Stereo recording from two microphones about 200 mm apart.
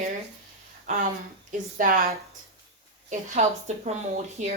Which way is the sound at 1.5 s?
40° right (ahead or behind).